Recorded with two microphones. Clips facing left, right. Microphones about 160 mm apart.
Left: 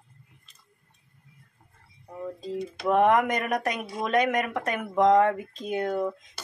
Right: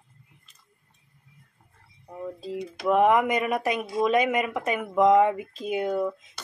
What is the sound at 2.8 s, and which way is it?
Speech, 5° right (ahead or behind).